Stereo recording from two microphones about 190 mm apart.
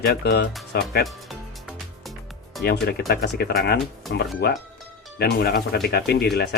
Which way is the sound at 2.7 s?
60° left (ahead or behind).